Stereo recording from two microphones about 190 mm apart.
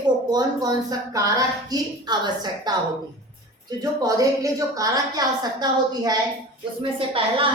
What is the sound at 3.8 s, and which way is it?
A woman's voice, 20° right (ahead or behind).